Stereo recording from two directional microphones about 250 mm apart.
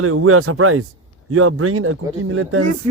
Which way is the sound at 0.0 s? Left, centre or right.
Right.